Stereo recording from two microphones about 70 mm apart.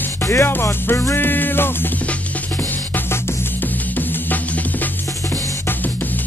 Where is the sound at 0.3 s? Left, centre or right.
Left.